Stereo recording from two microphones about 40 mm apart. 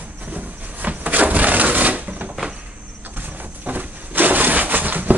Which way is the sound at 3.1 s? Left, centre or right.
Right.